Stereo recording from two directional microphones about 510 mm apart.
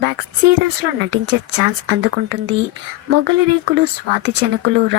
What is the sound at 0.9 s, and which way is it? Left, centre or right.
Speech, right.